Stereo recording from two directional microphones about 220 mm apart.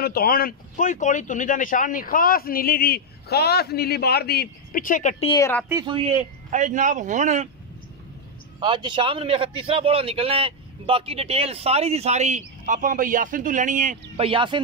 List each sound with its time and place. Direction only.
0.0 s speech: 45° left (ahead or behind)
5.3 s a woman's voice: 10° left (ahead or behind)
5.7 s a man's voice: 20° right (ahead or behind)
8.5 s a man's voice: 20° right (ahead or behind)